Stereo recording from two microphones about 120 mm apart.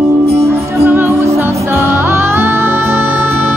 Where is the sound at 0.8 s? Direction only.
15° right (ahead or behind).